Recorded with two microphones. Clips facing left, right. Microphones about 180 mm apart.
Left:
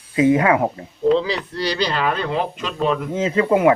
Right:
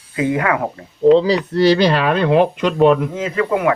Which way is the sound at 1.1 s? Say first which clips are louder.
Right 7 dB; 35° right (ahead or behind).